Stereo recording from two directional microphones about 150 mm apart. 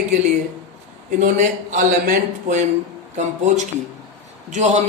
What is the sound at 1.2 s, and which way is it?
A woman's voice, 60° right (ahead or behind).